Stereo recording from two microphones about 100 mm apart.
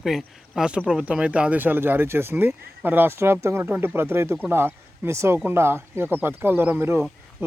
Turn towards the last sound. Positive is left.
turn(degrees=-20)  # may be behind; listen again after turning